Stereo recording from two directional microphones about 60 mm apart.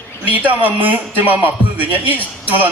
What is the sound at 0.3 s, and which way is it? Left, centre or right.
Speech, right.